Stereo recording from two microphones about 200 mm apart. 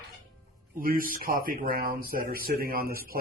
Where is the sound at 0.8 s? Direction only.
45° right (ahead or behind).